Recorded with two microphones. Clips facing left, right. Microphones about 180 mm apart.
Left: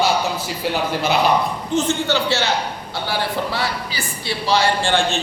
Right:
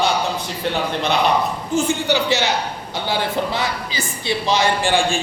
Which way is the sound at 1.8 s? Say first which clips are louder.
Right 1 dB; 15° right (ahead or behind).